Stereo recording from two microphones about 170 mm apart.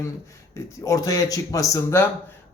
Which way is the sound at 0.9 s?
20° left (ahead or behind).